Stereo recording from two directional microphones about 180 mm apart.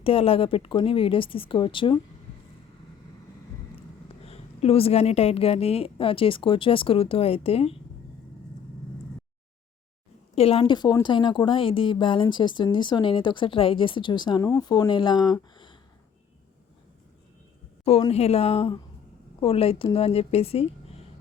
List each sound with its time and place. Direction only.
0.0 s a woman's voice: 30° left (ahead or behind)
4.1 s a woman's voice: 35° left (ahead or behind)
10.3 s a woman's voice: 35° left (ahead or behind)
18.1 s a woman's voice: 35° left (ahead or behind)